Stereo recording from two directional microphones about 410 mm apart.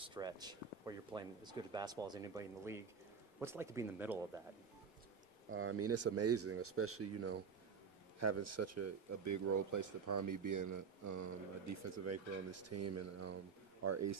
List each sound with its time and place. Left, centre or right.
0.0 s speech: centre
5.5 s speech: right